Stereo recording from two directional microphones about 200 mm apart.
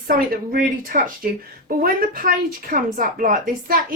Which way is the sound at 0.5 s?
45° right (ahead or behind).